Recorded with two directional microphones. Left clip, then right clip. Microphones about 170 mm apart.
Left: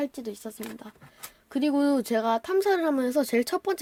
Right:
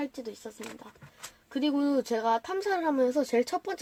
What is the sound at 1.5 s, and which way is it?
Speech, 60° left (ahead or behind).